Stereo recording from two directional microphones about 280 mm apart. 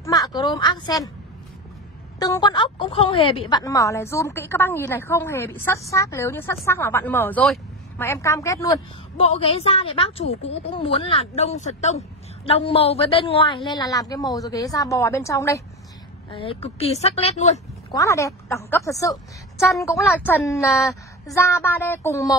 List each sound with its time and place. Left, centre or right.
0.0 s a woman's voice: centre
2.1 s a woman's voice: centre
17.9 s a woman's voice: centre